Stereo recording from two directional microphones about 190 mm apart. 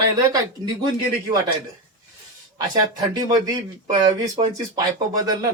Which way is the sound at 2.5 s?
20° right (ahead or behind).